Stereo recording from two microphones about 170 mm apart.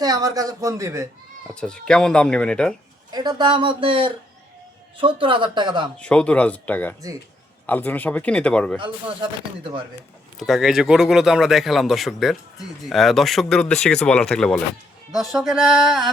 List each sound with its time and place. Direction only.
0.0 s speech: 20° right (ahead or behind)
1.5 s a man's voice: 5° left (ahead or behind)
3.1 s speech: 25° right (ahead or behind)
6.0 s speech: 5° left (ahead or behind)
10.3 s a man's voice: centre (ahead or behind)